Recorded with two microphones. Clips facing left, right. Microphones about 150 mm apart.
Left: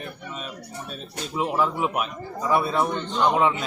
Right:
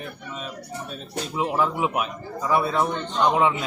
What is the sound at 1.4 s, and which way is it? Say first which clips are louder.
Speech: even; centre (ahead or behind).